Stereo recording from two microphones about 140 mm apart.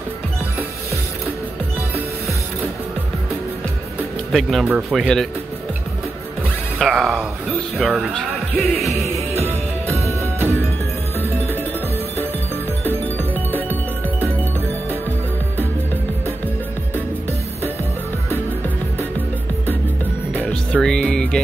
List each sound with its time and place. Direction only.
4.3 s speech: centre (ahead or behind)
4.6 s speech: 10° right (ahead or behind)
5.0 s speech: 5° left (ahead or behind)
6.8 s speech: centre (ahead or behind)
8.1 s music: 5° left (ahead or behind)
9.8 s music: 20° left (ahead or behind)
13.5 s music: 15° left (ahead or behind)
20.4 s music: 5° left (ahead or behind)